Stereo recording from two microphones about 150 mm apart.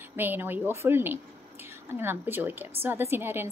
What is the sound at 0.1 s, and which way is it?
A woman's voice, 15° right (ahead or behind).